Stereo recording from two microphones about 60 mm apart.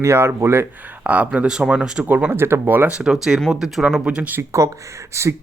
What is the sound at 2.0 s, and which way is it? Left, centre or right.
Speech, right.